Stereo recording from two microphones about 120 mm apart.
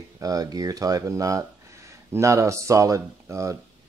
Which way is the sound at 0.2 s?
30° right (ahead or behind).